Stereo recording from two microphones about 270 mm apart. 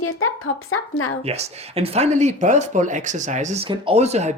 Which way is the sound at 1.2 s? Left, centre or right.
Right.